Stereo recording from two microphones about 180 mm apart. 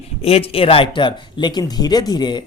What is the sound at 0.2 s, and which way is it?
Speech, 35° left (ahead or behind).